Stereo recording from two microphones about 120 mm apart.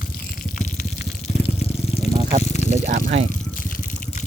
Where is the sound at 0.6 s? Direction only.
90° left.